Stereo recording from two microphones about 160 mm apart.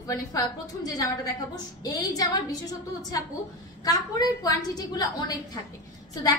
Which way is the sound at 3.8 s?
25° left (ahead or behind).